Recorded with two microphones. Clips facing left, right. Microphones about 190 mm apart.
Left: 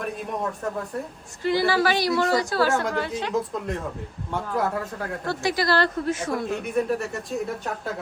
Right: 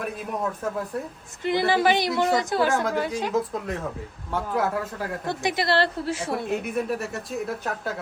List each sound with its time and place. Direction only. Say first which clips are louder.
0.0 s speech: even; centre (ahead or behind)
1.5 s a woman's voice: even; 20° right (ahead or behind)
2.7 s a woman's voice: right 1 dB; centre (ahead or behind)
5.2 s a woman's voice: left 2 dB; 20° right (ahead or behind)
6.3 s speech: even; centre (ahead or behind)